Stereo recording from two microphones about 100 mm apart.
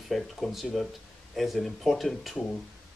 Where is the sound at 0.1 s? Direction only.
Centre (ahead or behind).